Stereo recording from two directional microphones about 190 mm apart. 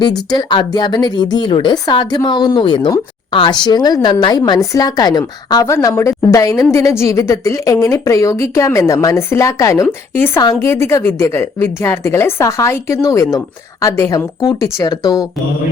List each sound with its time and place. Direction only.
0.0 s a woman's voice: 20° left (ahead or behind)